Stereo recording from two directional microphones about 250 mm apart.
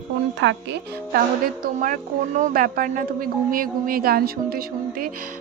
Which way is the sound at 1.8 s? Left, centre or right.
Right.